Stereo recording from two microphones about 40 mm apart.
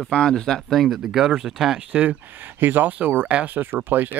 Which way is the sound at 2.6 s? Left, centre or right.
Right.